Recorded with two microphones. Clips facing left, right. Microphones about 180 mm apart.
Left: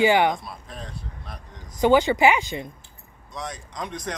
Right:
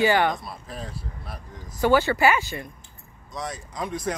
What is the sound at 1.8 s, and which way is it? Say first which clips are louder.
Speech: left 2 dB; 15° left (ahead or behind).